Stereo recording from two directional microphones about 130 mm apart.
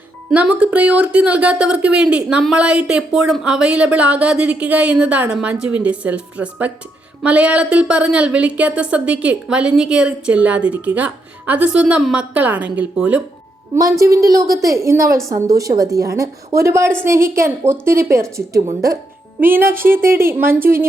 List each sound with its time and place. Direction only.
0.3 s speech: 10° right (ahead or behind)
14.0 s a woman's voice: 25° right (ahead or behind)